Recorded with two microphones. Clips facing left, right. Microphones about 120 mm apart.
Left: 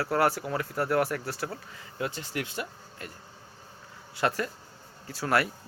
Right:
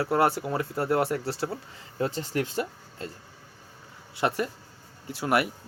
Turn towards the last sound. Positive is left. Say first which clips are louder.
# right 2 dB
turn(degrees=-20)  # may be behind; listen again after turning